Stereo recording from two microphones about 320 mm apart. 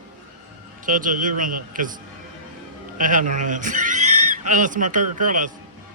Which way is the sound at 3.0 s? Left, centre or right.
Right.